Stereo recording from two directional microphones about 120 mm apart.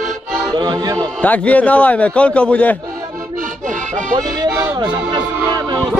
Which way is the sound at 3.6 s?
90° right.